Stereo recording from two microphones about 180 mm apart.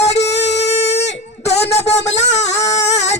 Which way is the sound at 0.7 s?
35° left (ahead or behind).